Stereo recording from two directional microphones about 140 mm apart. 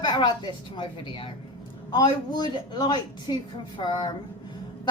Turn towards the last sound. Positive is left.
turn(degrees=30)  # may be behind; listen again after turning